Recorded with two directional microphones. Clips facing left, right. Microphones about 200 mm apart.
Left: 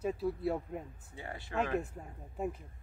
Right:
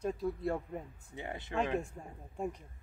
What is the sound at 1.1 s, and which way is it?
Speech, 20° right (ahead or behind).